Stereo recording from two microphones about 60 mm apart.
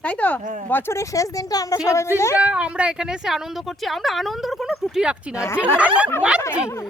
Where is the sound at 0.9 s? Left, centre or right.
Left.